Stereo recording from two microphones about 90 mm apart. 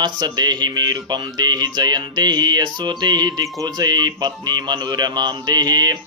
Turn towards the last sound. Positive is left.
turn(degrees=-50)  # may be behind; listen again after turning